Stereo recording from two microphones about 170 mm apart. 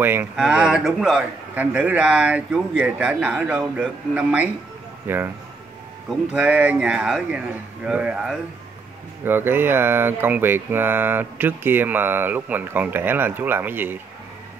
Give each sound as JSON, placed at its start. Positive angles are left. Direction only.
{"t": 0.0, "sound": "a man's voice", "side_deg": -10}